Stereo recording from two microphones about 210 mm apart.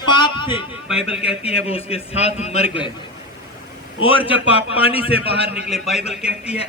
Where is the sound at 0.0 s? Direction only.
20° left (ahead or behind).